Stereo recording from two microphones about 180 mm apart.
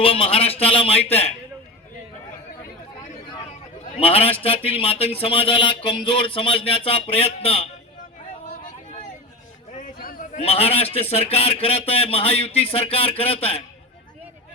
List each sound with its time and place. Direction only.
0.0 s speech: 30° left (ahead or behind)
3.9 s speech: 30° left (ahead or behind)
9.7 s a sound: 50° left (ahead or behind)
10.4 s speech: 35° left (ahead or behind)